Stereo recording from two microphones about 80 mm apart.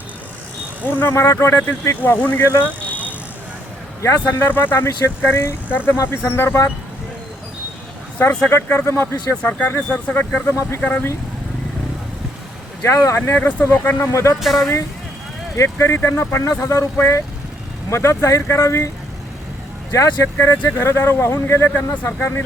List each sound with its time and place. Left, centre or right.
0.9 s speech: left
2.9 s vehicle: right
4.2 s speech: left
8.4 s speech: left
9.3 s speech: centre
12.8 s speech: left
13.2 s speech: left
14.1 s speech: left
14.3 s speech: centre
15.5 s speech: left
19.9 s speech: left